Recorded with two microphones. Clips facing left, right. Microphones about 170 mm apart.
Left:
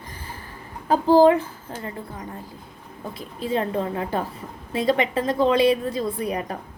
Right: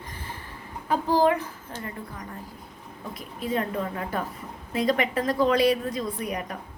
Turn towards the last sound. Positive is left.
turn(degrees=30)  # may be behind; listen again after turning